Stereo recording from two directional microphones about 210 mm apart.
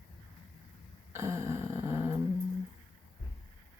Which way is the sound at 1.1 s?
15° right (ahead or behind).